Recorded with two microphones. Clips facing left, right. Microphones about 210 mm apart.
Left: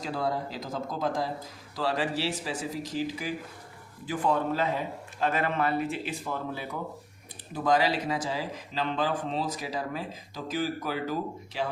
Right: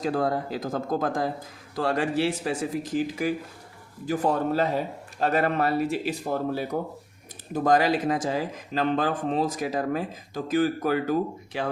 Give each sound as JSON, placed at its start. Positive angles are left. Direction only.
{"t": 0.0, "sound": "a man's voice", "side_deg": -50}